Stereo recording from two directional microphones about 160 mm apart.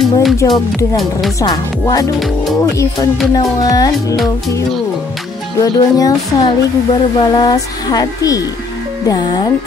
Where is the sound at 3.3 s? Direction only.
25° left (ahead or behind).